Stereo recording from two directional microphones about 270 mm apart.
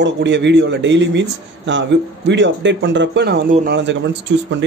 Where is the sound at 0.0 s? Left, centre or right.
Right.